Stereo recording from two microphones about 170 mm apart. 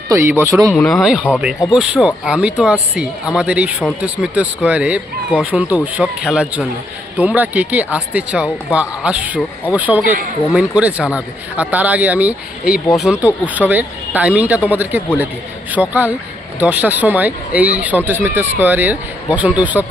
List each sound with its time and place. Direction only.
0.1 s speech: 15° right (ahead or behind)
0.7 s speech: 5° left (ahead or behind)